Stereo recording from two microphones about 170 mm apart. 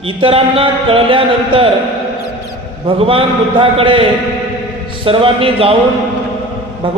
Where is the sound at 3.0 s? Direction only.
30° right (ahead or behind).